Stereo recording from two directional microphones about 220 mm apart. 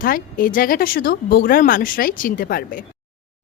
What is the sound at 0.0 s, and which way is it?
A woman's voice, 40° left (ahead or behind).